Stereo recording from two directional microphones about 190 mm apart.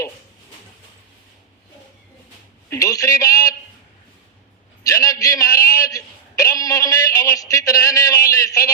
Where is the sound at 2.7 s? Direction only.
15° left (ahead or behind).